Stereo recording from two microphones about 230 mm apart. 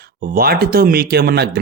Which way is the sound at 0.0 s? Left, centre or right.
Right.